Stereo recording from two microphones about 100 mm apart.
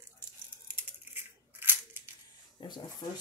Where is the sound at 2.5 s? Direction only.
50° left (ahead or behind).